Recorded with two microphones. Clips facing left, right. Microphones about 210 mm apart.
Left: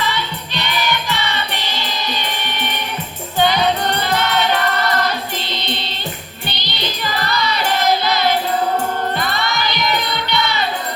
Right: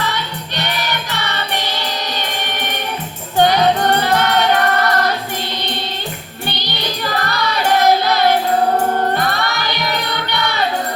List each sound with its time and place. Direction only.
0.0 s music: 60° right (ahead or behind)
6.7 s music: 55° right (ahead or behind)